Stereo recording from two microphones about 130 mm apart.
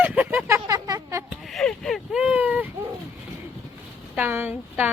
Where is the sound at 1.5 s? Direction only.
5° left (ahead or behind).